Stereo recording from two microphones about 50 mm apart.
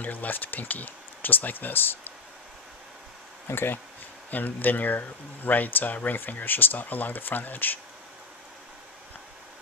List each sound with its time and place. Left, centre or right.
0.0 s speech: left
3.4 s speech: left
4.3 s speech: left